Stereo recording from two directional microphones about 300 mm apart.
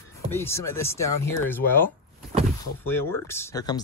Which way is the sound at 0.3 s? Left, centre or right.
Centre.